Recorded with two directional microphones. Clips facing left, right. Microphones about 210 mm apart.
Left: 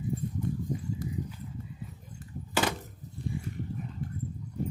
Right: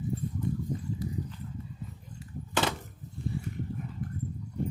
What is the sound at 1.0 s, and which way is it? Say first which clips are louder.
Clip-clop: right 1 dB; 50° left (ahead or behind).